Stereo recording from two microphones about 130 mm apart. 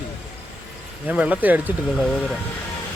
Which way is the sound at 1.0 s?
10° right (ahead or behind).